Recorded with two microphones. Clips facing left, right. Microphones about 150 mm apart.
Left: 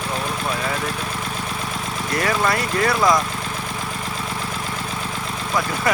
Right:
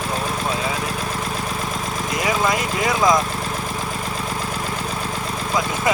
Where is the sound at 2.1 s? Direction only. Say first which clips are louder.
Even; 15° right (ahead or behind).